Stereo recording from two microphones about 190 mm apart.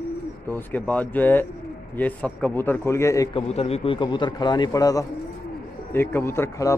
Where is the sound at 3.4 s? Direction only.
30° left (ahead or behind).